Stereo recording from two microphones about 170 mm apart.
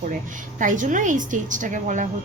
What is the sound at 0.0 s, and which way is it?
A woman's voice, 50° right (ahead or behind).